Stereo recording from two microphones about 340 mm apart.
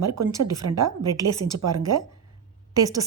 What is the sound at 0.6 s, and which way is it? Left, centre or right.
Speech, right.